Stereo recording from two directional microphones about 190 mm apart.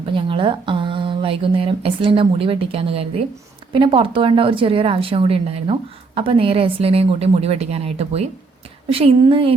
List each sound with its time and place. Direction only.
0.1 s a woman's voice: 25° right (ahead or behind)